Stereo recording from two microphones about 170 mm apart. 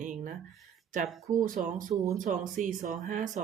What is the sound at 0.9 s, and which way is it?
A woman's voice, 50° right (ahead or behind).